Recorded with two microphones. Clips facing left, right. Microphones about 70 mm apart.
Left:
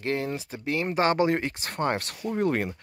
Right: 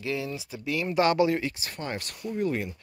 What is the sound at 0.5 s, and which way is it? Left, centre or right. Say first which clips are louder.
Speech: even; left.